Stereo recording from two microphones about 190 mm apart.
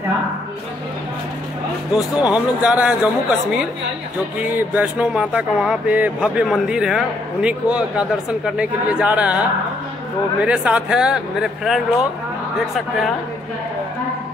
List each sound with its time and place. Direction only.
1.9 s speech: 5° right (ahead or behind)
10.4 s speech: 5° right (ahead or behind)